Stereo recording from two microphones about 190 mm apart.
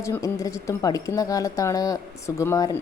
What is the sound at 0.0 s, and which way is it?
A woman's voice, 15° left (ahead or behind).